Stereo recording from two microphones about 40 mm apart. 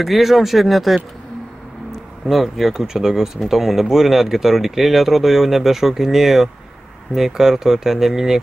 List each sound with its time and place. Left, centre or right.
0.0 s speech: centre
2.2 s speech: centre